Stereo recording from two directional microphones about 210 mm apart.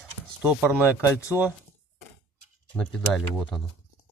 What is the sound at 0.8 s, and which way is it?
Speech, 15° left (ahead or behind).